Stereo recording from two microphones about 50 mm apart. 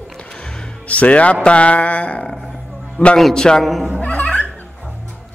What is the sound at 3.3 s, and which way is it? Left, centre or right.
Speech, centre.